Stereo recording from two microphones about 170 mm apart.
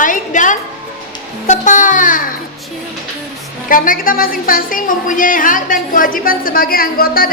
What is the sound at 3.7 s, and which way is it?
A woman's voice, 55° left (ahead or behind).